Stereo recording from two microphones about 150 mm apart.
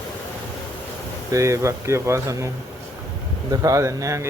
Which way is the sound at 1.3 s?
20° right (ahead or behind).